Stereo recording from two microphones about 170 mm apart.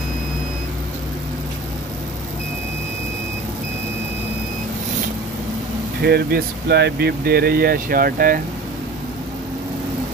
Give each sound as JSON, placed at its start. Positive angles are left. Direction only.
{"t": 6.0, "sound": "speech", "side_deg": -65}